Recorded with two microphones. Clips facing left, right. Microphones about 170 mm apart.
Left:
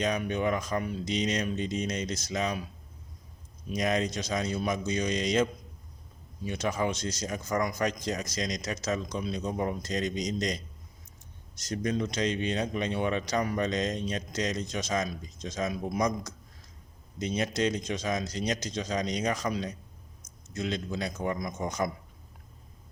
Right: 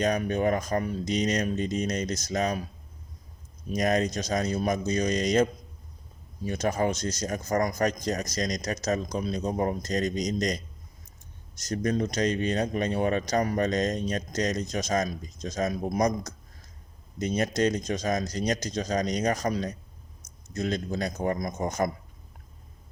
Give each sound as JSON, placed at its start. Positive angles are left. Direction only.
{"t": 0.0, "sound": "speech", "side_deg": -40}
{"t": 3.7, "sound": "speech", "side_deg": -45}